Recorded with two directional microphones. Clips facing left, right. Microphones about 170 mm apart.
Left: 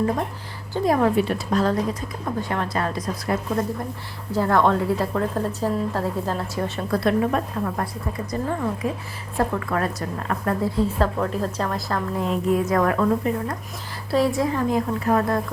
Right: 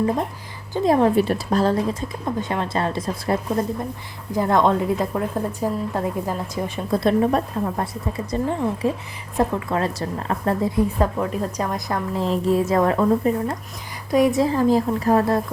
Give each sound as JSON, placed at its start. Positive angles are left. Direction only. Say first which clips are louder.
{"t": 0.7, "sound": "a woman's voice", "louder": "right 2 dB", "side_deg": -25}
{"t": 1.1, "sound": "a woman's voice", "louder": "right 2 dB", "side_deg": -35}
{"t": 4.3, "sound": "a woman's voice", "louder": "right 1 dB", "side_deg": -15}
{"t": 7.0, "sound": "a woman's voice", "louder": "right 3 dB", "side_deg": -30}
{"t": 12.1, "sound": "a woman's voice", "louder": "right 2 dB", "side_deg": -30}